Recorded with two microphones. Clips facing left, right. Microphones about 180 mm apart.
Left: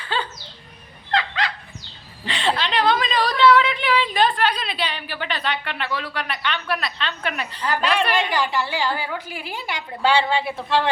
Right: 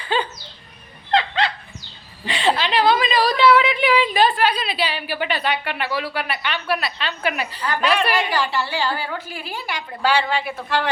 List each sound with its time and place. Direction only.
0.1 s a sound: 15° right (ahead or behind)
1.1 s dog: 25° right (ahead or behind)
2.2 s a woman's voice: 10° right (ahead or behind)
8.1 s a woman's voice: 20° left (ahead or behind)